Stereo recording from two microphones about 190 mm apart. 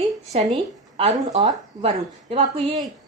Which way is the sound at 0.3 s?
30° right (ahead or behind).